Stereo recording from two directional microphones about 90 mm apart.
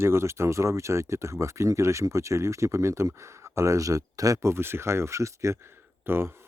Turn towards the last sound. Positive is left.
turn(degrees=-25)  # may be behind; listen again after turning